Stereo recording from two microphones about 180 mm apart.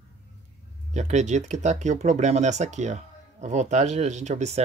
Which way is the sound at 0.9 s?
40° right (ahead or behind).